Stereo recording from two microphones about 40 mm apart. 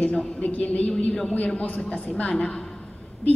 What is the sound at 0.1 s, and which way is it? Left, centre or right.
Speech, left.